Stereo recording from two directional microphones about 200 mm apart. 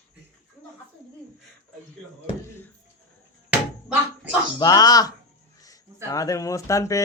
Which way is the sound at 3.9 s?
5° right (ahead or behind).